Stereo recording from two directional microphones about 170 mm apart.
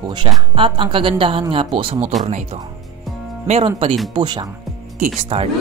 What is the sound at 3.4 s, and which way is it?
Speech, 40° right (ahead or behind).